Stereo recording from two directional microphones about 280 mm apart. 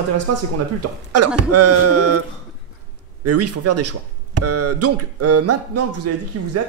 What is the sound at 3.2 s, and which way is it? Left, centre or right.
Speech, right.